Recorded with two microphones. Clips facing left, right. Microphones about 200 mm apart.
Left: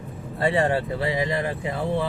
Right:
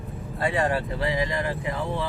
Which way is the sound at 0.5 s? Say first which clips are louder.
Left 2 dB; 25° left (ahead or behind).